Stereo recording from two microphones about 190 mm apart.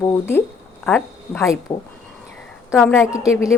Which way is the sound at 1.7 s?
20° left (ahead or behind).